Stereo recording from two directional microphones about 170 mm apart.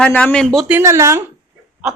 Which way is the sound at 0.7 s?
15° right (ahead or behind).